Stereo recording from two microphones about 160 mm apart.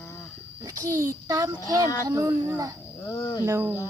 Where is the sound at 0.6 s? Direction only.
25° right (ahead or behind).